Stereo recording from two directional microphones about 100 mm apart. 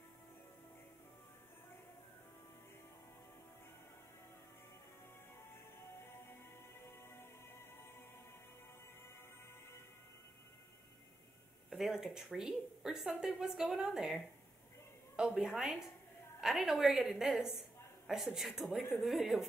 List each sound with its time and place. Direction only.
6.9 s music: 25° left (ahead or behind)
11.7 s a woman's voice: 5° right (ahead or behind)